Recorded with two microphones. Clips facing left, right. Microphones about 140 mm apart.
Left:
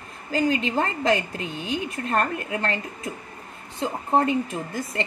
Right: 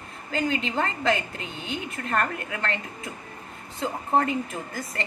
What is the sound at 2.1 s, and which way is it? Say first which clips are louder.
A woman's voice: left 2 dB; 30° left (ahead or behind).